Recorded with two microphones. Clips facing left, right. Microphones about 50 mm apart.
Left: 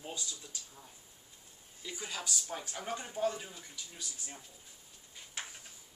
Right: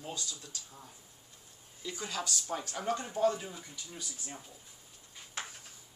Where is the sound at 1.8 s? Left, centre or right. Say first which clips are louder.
Right 4 dB; centre.